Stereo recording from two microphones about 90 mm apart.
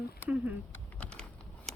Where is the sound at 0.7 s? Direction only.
15° left (ahead or behind).